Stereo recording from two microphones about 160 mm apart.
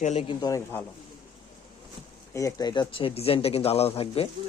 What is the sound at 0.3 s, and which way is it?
Speech, 25° left (ahead or behind).